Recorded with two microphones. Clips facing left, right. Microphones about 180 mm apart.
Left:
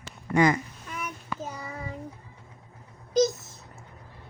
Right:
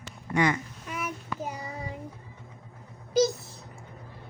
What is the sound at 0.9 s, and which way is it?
Child singing, 10° right (ahead or behind).